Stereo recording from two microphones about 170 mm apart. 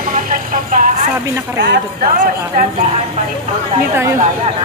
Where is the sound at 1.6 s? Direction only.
75° right (ahead or behind).